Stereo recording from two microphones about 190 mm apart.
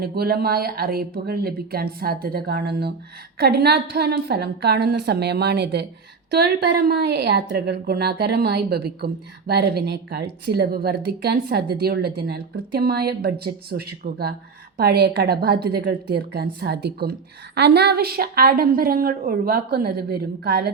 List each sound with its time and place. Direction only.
0.0 s a woman's voice: 55° right (ahead or behind)